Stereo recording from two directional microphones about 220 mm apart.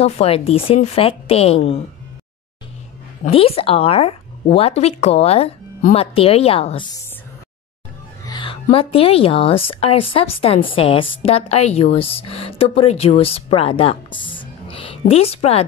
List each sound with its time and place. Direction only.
0.0 s speech: 25° left (ahead or behind)
3.3 s speech: 25° left (ahead or behind)
8.3 s music: 20° left (ahead or behind)
8.6 s speech: 25° left (ahead or behind)